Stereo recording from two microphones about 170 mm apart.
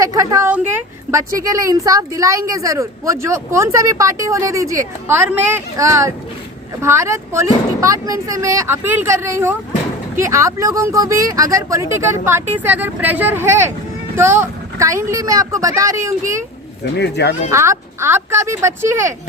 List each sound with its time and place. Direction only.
0.0 s a woman's voice: 20° right (ahead or behind)
17.0 s speech: 80° left
17.5 s a woman's voice: 15° right (ahead or behind)